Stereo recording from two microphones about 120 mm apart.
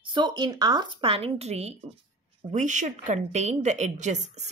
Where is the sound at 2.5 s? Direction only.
90° right.